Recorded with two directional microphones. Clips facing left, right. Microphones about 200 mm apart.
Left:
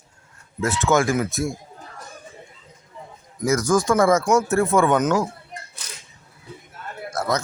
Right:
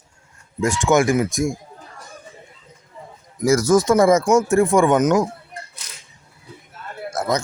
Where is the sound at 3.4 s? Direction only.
25° right (ahead or behind).